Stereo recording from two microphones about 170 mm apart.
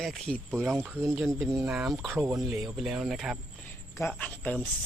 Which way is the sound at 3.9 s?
10° left (ahead or behind).